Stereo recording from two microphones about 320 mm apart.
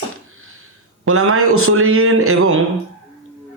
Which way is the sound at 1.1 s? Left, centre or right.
Right.